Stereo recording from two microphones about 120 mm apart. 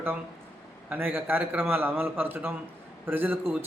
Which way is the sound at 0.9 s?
15° right (ahead or behind).